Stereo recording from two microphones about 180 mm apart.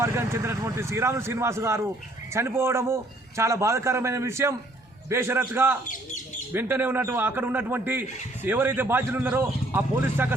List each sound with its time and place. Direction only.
0.0 s a man's voice: 15° right (ahead or behind)